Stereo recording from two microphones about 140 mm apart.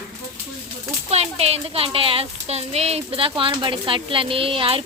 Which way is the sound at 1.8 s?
40° right (ahead or behind).